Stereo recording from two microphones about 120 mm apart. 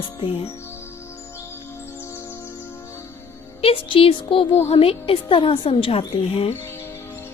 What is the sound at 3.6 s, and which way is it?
A woman's voice, 50° left (ahead or behind).